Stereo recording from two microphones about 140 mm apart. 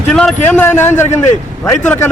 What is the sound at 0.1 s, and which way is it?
A man's voice, 5° left (ahead or behind).